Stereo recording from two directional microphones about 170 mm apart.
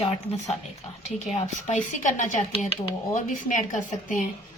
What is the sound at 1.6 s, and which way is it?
Speech, 45° left (ahead or behind).